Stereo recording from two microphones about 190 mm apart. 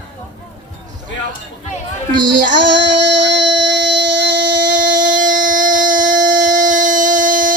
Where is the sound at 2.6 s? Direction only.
70° right (ahead or behind).